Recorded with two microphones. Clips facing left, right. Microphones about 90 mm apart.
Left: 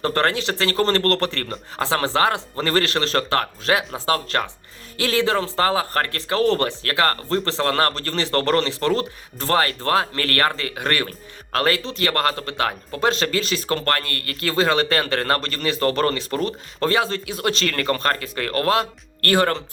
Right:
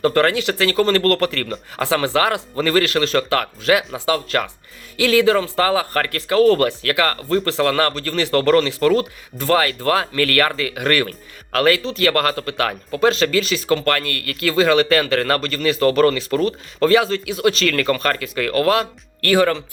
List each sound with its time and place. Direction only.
0.0 s a man's voice: 30° left (ahead or behind)
4.3 s a man's voice: 25° left (ahead or behind)
19.2 s speech: 40° left (ahead or behind)